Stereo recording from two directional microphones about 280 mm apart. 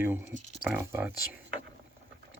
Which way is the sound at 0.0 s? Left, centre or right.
Centre.